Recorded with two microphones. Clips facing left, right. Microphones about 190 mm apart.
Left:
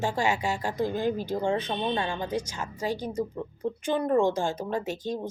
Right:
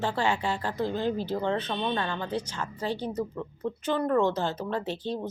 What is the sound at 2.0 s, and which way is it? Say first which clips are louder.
Speech: left 1 dB; 10° left (ahead or behind).